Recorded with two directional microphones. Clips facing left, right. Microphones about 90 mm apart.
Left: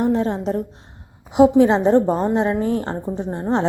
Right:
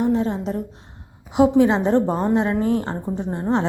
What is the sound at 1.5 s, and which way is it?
A woman's voice, 25° left (ahead or behind).